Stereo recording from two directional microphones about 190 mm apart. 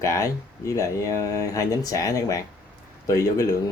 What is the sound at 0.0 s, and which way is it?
Speech, 15° left (ahead or behind).